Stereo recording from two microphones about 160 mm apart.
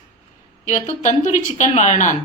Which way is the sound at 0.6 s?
50° left (ahead or behind).